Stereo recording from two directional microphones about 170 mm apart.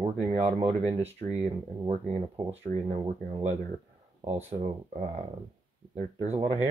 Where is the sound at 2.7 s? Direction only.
45° right (ahead or behind).